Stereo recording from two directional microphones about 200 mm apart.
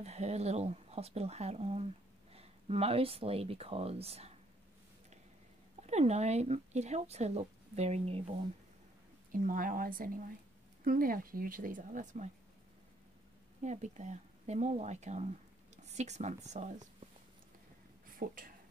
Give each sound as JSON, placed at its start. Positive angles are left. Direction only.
{"t": 0.0, "sound": "speech", "side_deg": -30}
{"t": 5.9, "sound": "speech", "side_deg": -35}
{"t": 9.3, "sound": "speech", "side_deg": -45}
{"t": 13.6, "sound": "speech", "side_deg": -35}
{"t": 18.0, "sound": "a sound", "side_deg": -45}